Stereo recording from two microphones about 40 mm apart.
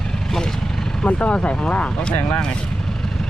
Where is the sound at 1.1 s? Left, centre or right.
Left.